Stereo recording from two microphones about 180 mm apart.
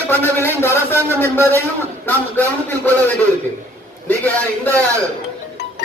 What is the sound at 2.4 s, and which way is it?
Speech, 10° left (ahead or behind).